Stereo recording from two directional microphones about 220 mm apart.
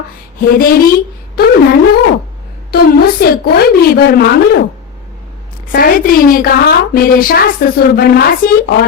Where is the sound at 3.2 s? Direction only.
45° left (ahead or behind).